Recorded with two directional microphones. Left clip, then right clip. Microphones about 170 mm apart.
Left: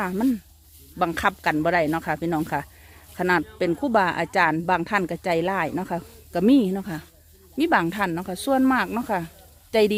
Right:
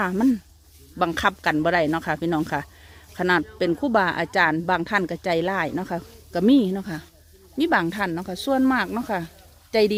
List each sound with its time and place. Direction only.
0.0 s speech: 20° right (ahead or behind); by 9.3 s centre (ahead or behind)